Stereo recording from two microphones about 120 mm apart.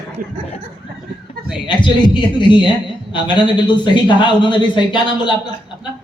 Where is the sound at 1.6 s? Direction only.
40° left (ahead or behind).